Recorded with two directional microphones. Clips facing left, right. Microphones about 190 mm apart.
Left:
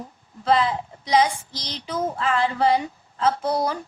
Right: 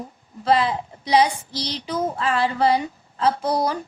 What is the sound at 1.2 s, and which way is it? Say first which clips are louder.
Child singing: right 1 dB; 35° right (ahead or behind).